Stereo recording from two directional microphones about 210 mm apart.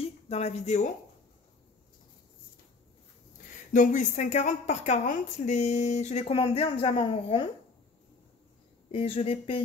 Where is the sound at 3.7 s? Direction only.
35° left (ahead or behind).